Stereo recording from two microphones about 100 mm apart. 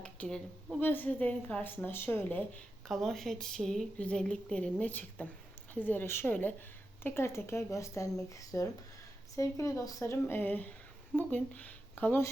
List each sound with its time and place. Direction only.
0.0 s a sound: 10° left (ahead or behind)
0.8 s a woman's voice: 20° left (ahead or behind)
2.8 s a woman's voice: 5° left (ahead or behind); by 10.0 s 35° left (ahead or behind)
10.0 s speech: 20° left (ahead or behind)